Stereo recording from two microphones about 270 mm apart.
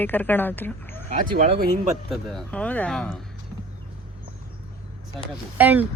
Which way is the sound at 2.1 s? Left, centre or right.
Centre.